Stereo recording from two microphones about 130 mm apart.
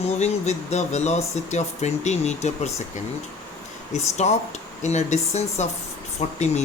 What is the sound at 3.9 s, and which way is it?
Speech, 60° left (ahead or behind).